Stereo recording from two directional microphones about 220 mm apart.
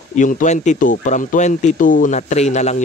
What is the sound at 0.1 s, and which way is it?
Speech, 35° left (ahead or behind).